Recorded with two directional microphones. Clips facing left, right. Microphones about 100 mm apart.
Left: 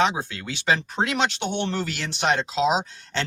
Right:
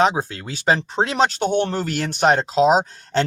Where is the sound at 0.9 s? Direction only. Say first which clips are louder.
Right 5 dB; 30° right (ahead or behind).